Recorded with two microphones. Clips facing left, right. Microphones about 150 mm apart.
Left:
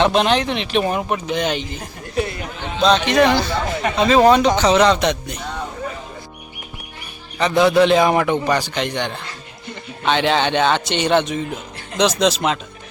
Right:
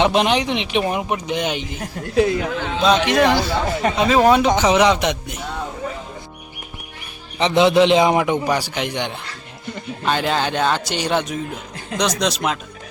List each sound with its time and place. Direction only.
0.0 s a man's voice: 15° right (ahead or behind)
2.1 s speech: 90° right
3.1 s a man's voice: 10° right (ahead or behind)
7.3 s a man's voice: 20° right (ahead or behind); by 12.5 s centre (ahead or behind)